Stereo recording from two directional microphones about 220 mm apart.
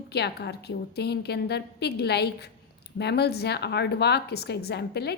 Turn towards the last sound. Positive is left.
turn(degrees=50)  # may be behind; listen again after turning